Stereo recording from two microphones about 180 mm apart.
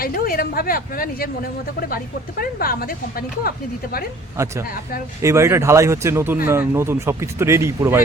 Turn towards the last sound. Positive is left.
turn(degrees=-15)  # may be behind; listen again after turning